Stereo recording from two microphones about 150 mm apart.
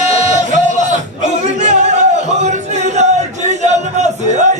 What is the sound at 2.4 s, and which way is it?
Music, 50° right (ahead or behind).